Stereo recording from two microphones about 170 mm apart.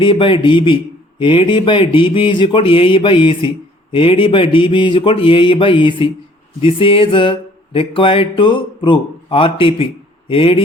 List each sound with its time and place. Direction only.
0.0 s speech: 30° left (ahead or behind)
3.9 s a sound: 30° left (ahead or behind)
6.6 s mantra: 30° left (ahead or behind)